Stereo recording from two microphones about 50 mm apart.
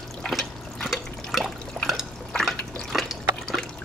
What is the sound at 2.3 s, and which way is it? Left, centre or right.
Drip, centre.